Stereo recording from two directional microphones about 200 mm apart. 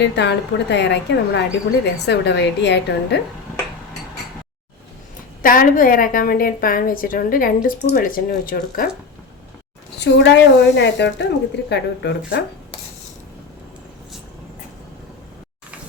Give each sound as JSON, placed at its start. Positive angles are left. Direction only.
{"t": 0.0, "sound": "a woman's voice", "side_deg": 60}
{"t": 5.4, "sound": "a woman's voice", "side_deg": 45}
{"t": 10.0, "sound": "a woman's voice", "side_deg": 60}